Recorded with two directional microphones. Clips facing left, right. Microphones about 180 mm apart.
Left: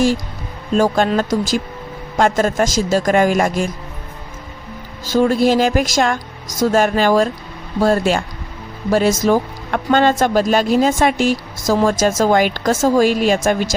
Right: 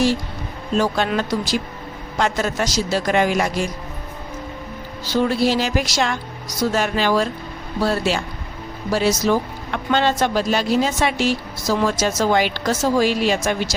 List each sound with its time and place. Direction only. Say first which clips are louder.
0.8 s speech: left 5 dB; 45° left (ahead or behind)
5.0 s speech: left 4 dB; 45° left (ahead or behind)